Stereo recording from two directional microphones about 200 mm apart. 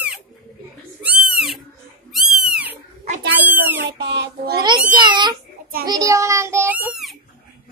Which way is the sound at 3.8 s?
60° right (ahead or behind).